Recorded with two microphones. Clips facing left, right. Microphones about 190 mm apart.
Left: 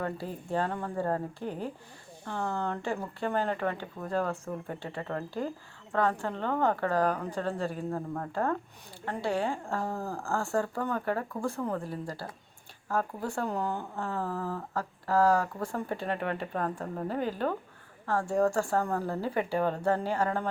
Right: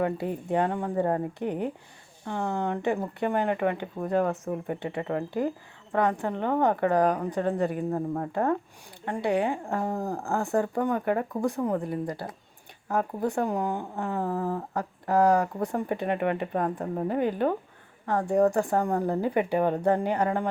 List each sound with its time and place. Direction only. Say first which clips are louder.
0.5 s speech: right 5 dB; 15° right (ahead or behind)